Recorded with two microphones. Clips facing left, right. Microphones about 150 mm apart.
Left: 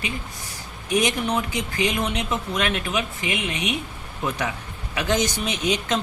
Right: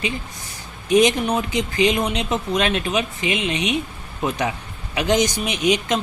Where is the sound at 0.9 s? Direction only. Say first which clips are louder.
Right 6 dB; 25° right (ahead or behind).